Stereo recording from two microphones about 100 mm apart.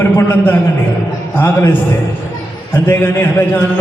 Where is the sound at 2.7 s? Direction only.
20° left (ahead or behind).